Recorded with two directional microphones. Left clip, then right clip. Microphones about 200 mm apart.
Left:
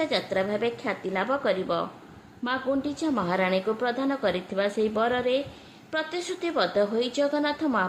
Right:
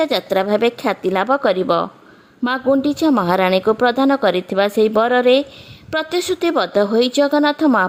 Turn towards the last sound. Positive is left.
turn(degrees=-50)  # may be behind; listen again after turning